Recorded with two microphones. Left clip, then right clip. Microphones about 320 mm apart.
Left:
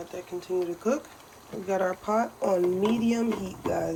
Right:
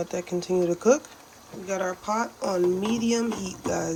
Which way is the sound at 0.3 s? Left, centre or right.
Right.